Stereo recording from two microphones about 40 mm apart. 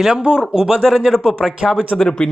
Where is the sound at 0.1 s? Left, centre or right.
Right.